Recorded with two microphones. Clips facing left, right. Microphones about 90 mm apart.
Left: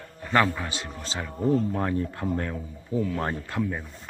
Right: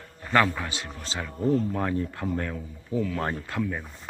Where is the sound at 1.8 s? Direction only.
25° left (ahead or behind).